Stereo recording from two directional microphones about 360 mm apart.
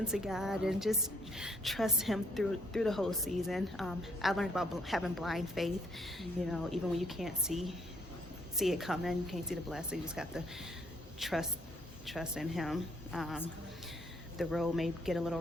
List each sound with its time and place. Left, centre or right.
0.0 s a woman's voice: centre